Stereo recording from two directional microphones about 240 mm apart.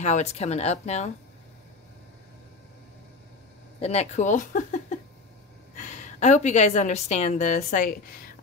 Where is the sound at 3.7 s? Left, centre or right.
Left.